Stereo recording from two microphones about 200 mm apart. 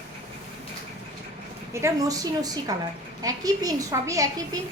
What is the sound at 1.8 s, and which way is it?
A woman's voice, 15° right (ahead or behind).